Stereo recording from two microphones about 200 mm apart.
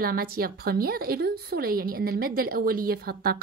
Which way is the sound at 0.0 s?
50° right (ahead or behind).